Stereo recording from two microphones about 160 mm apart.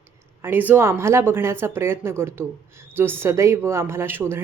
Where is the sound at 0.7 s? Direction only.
15° right (ahead or behind).